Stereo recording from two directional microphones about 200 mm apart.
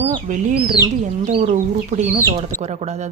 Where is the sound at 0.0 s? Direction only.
30° right (ahead or behind).